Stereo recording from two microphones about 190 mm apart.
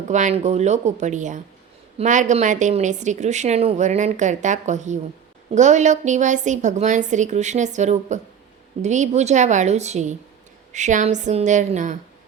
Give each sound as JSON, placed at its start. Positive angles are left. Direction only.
{"t": 0.1, "sound": "a woman's voice", "side_deg": -40}